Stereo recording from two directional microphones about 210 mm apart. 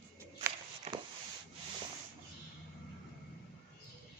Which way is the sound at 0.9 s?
30° right (ahead or behind).